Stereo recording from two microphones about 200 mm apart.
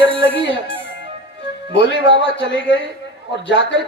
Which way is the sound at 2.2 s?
60° left (ahead or behind).